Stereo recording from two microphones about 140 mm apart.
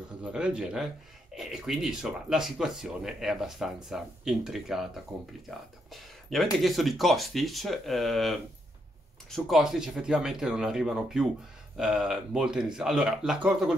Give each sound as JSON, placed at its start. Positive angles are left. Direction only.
{"t": 0.2, "sound": "speech", "side_deg": -10}
{"t": 6.3, "sound": "speech", "side_deg": 0}